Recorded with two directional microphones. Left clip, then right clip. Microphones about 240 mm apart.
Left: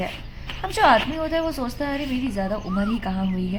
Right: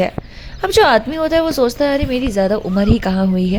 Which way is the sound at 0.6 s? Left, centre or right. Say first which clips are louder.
Right 6 dB; right.